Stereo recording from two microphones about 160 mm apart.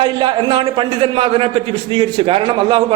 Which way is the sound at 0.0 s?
30° right (ahead or behind).